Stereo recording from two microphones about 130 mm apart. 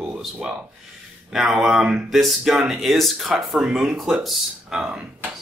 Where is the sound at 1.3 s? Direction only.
5° right (ahead or behind).